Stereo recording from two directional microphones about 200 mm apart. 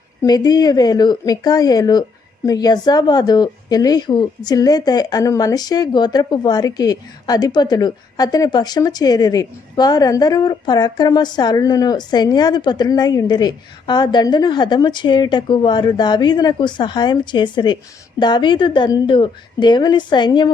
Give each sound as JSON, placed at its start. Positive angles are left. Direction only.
{"t": 0.2, "sound": "a woman's voice", "side_deg": 20}